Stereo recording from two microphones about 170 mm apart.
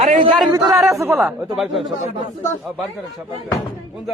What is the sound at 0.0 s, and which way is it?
Speech, 45° right (ahead or behind).